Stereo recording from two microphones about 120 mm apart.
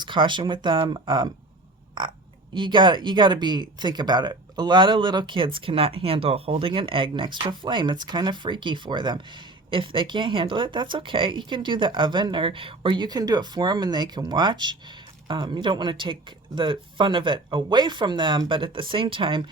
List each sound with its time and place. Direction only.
0.0 s speech: 40° right (ahead or behind)